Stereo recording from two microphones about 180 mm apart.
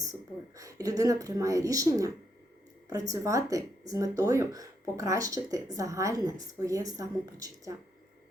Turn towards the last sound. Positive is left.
turn(degrees=-20)  # may be behind; listen again after turning